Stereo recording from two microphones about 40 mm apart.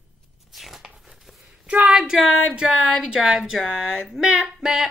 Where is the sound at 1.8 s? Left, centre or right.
Centre.